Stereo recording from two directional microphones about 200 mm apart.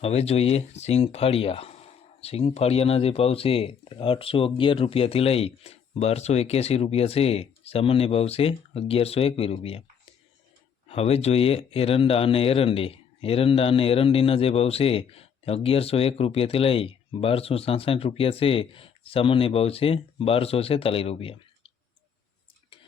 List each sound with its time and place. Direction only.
0.0 s speech: 30° left (ahead or behind)
10.8 s speech: 30° left (ahead or behind)